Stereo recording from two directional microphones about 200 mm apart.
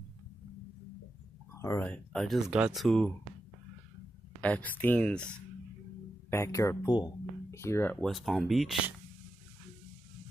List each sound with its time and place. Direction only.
1.5 s speech: 15° left (ahead or behind)
4.4 s speech: 5° left (ahead or behind)
6.3 s speech: 15° left (ahead or behind); by 8.9 s centre (ahead or behind)